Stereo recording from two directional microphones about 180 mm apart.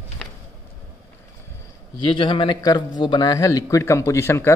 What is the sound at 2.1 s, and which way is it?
Speech, 25° left (ahead or behind).